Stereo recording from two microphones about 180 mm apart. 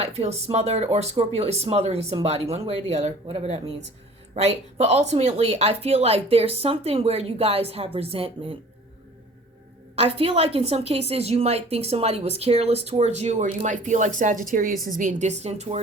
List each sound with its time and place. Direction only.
0.0 s a woman's voice: 35° right (ahead or behind)
9.9 s a woman's voice: 35° right (ahead or behind)